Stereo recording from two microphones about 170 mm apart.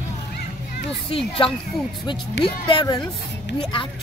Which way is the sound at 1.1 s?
30° left (ahead or behind).